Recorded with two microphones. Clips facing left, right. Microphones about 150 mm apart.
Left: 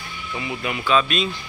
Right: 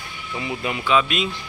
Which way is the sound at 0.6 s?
20° right (ahead or behind).